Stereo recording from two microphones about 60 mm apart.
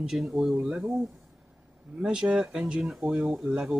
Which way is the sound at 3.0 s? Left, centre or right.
Right.